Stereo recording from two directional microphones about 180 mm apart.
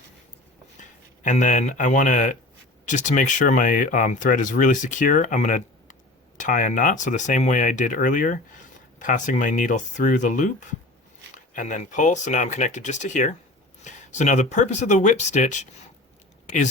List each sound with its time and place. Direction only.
0.8 s speech: 45° left (ahead or behind)